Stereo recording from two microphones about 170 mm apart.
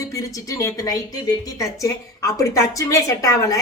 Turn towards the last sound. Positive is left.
turn(degrees=20)  # may be behind; listen again after turning